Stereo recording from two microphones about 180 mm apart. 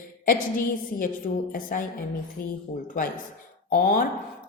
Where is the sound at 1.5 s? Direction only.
50° left (ahead or behind).